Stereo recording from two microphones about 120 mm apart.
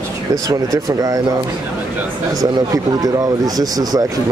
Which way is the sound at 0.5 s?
30° right (ahead or behind).